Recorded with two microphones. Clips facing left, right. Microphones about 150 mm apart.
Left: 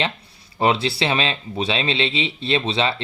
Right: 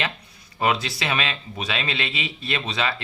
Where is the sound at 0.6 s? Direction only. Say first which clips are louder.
Left 4 dB; 30° left (ahead or behind).